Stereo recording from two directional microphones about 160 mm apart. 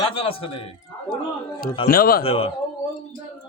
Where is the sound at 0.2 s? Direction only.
35° left (ahead or behind).